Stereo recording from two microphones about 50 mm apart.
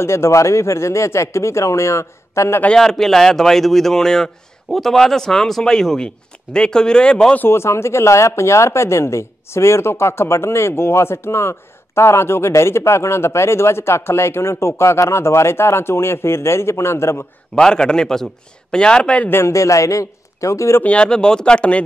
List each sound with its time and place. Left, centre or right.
0.0 s speech: left
2.8 s a man's voice: centre
7.4 s speech: left
17.6 s a man's voice: centre
19.3 s a man's voice: left
20.8 s speech: left